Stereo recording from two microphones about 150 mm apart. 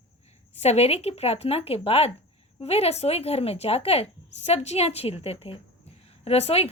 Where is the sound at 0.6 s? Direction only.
45° left (ahead or behind).